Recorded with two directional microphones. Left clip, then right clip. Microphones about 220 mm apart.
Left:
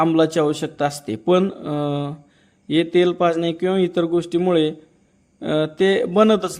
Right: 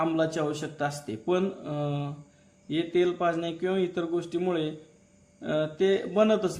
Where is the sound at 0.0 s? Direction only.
35° left (ahead or behind).